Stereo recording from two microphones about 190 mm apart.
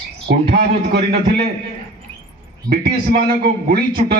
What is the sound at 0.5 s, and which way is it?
Speech, 60° right (ahead or behind).